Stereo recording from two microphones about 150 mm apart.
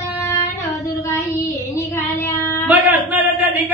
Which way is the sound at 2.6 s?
10° right (ahead or behind).